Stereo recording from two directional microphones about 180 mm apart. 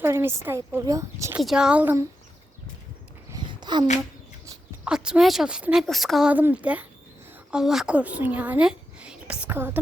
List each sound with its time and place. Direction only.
0.0 s a woman's voice: 15° right (ahead or behind)
1.4 s speech: 5° right (ahead or behind)
3.3 s a sound: 25° right (ahead or behind)
4.9 s speech: 5° right (ahead or behind)